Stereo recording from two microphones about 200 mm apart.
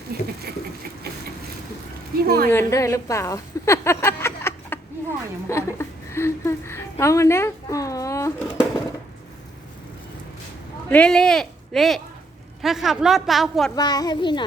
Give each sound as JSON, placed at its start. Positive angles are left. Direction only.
{"t": 0.1, "sound": "a woman's voice", "side_deg": -50}
{"t": 2.2, "sound": "a woman's voice", "side_deg": -50}
{"t": 2.5, "sound": "a woman's voice", "side_deg": 15}
{"t": 10.8, "sound": "a woman's voice", "side_deg": 5}
{"t": 13.7, "sound": "a child's voice", "side_deg": 20}